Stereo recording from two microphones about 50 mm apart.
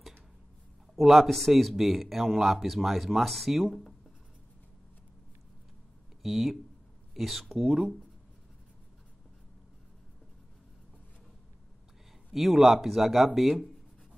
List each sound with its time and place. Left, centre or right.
0.9 s speech: centre
6.2 s speech: centre
7.6 s speech: centre
12.3 s speech: centre